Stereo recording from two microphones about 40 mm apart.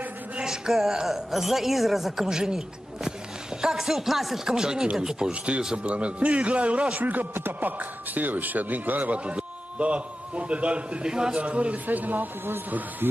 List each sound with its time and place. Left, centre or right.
0.4 s a woman's voice: centre
4.6 s a woman's voice: centre
5.3 s a man's voice: right
7.0 s a man's voice: right
9.2 s a man's voice: right
11.1 s a man's voice: centre
11.4 s a man's voice: right
11.8 s a man's voice: right
13.0 s speech: right